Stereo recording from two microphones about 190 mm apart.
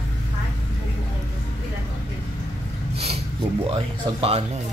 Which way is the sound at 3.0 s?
30° right (ahead or behind).